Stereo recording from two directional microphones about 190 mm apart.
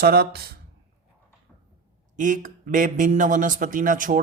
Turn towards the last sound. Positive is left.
turn(degrees=-45)  # may be behind; listen again after turning